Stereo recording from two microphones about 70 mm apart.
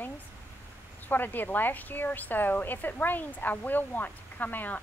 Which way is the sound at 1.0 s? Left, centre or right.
Left.